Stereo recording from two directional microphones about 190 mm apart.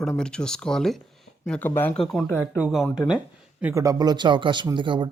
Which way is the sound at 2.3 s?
10° right (ahead or behind).